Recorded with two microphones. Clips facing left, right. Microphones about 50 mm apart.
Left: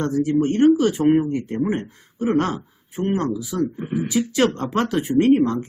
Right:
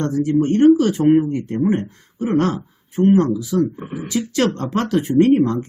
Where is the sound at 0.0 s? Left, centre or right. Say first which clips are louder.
Right 2 dB; centre.